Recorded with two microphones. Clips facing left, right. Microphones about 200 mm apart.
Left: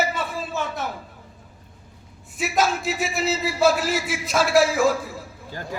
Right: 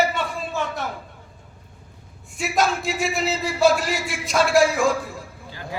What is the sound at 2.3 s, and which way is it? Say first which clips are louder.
A man's voice: even; 5° left (ahead or behind).